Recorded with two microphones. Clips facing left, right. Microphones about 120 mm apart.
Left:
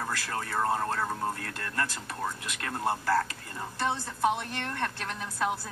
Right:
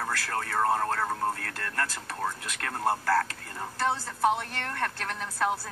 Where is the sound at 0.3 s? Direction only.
60° right (ahead or behind).